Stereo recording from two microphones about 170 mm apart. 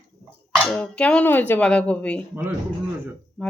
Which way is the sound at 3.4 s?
5° left (ahead or behind).